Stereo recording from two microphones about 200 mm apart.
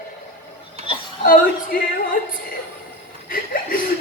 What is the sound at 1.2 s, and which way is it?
Music, 45° left (ahead or behind).